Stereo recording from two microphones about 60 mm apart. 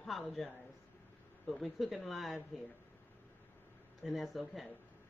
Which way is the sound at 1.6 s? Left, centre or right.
Centre.